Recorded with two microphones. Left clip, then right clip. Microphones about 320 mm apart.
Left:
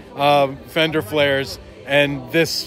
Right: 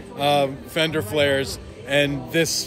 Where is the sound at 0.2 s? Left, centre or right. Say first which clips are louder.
Left 4 dB; left.